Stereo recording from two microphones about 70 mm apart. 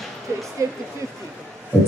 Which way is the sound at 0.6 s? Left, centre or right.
Right.